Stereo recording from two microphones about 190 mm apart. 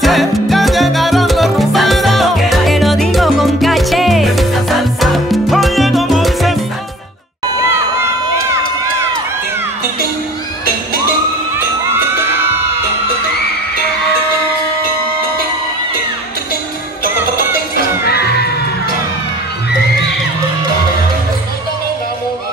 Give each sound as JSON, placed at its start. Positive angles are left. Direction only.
{"t": 0.0, "sound": "salsa music", "side_deg": 0}
{"t": 7.5, "sound": "crowd", "side_deg": -15}
{"t": 18.0, "sound": "music", "side_deg": 55}